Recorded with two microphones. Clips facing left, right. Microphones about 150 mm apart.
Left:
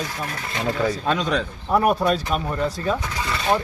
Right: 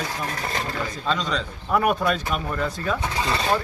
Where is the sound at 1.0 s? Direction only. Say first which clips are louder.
Left 3 dB; 55° left (ahead or behind).